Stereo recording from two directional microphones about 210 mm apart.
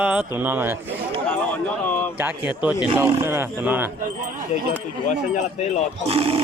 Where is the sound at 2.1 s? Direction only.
10° right (ahead or behind).